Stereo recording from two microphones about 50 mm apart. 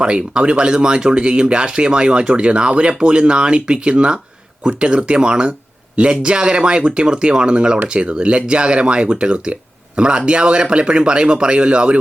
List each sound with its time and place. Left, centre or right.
0.0 s speech: right